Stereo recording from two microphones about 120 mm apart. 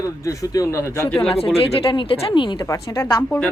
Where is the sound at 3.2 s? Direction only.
15° left (ahead or behind).